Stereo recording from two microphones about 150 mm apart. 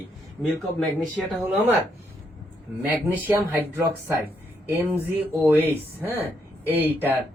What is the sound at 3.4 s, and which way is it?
Speech, 15° right (ahead or behind).